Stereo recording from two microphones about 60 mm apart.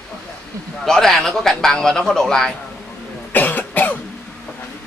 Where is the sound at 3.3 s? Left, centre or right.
Left.